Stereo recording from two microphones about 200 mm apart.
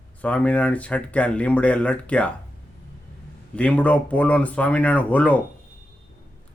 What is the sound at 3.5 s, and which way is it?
Speech, 5° left (ahead or behind).